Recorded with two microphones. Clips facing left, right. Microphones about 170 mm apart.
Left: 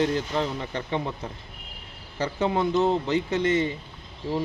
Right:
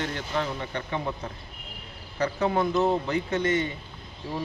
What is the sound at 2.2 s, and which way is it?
A man's voice, 25° left (ahead or behind).